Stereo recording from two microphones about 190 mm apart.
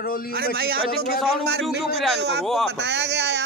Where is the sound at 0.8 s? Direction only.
55° left (ahead or behind).